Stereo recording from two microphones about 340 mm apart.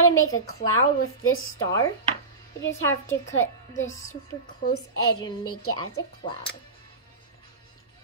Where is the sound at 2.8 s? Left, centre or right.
Centre.